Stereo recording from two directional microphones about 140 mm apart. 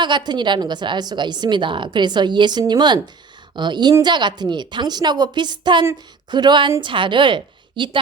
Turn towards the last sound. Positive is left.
turn(degrees=-35)  # may be behind; listen again after turning